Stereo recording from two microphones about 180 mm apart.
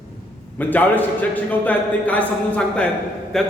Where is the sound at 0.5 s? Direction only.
10° left (ahead or behind).